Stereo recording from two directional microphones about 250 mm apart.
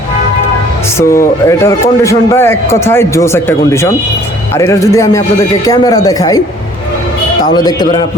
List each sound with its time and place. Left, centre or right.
0.9 s a man's voice: centre
7.5 s a man's voice: centre